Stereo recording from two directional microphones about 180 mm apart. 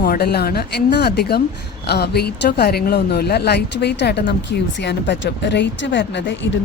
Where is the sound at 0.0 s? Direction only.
60° left (ahead or behind).